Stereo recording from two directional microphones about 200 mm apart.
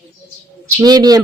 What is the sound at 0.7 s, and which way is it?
Speech, 20° right (ahead or behind).